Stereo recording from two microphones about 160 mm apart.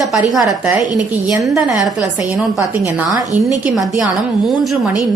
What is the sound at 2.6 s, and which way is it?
Speech, 20° right (ahead or behind).